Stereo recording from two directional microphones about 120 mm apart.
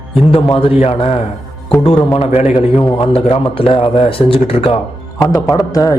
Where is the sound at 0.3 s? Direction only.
50° left (ahead or behind).